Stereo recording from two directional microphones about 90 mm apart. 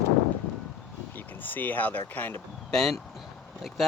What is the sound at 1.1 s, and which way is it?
Speech, 20° left (ahead or behind).